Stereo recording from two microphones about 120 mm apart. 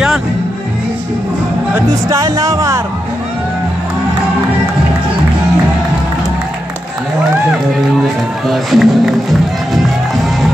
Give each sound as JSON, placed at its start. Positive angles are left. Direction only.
{"t": 1.8, "sound": "speech", "side_deg": -25}
{"t": 8.5, "sound": "speech", "side_deg": 0}